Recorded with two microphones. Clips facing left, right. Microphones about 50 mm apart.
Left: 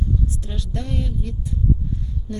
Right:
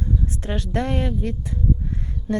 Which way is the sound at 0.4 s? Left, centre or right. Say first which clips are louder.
Right 6 dB; right.